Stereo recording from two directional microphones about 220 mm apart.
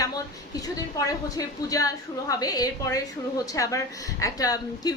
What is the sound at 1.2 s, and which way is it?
A woman's voice, 15° left (ahead or behind).